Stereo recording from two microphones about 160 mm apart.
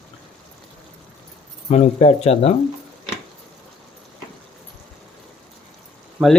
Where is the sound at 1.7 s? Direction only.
40° left (ahead or behind).